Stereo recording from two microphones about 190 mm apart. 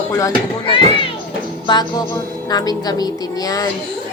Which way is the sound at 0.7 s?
25° left (ahead or behind).